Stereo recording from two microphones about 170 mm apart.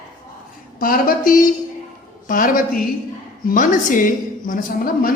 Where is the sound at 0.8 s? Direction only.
55° left (ahead or behind).